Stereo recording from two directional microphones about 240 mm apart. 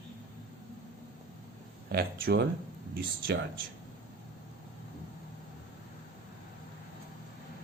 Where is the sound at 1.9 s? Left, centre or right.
Right.